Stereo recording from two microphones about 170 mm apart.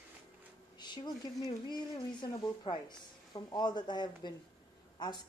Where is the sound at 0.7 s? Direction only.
25° left (ahead or behind).